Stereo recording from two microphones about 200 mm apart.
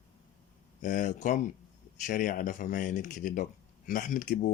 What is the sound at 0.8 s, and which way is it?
Speech, 40° left (ahead or behind).